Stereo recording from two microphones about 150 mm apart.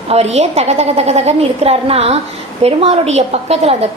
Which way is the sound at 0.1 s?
45° right (ahead or behind).